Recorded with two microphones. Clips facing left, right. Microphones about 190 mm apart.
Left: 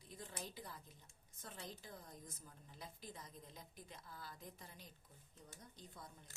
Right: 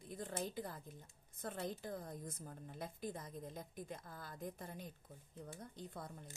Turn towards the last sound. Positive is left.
turn(degrees=-60)  # may be behind; listen again after turning